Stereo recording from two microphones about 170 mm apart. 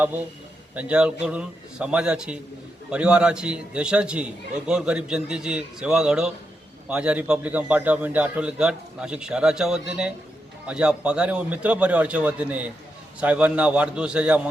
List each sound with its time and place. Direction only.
0.0 s a man's voice: 10° right (ahead or behind)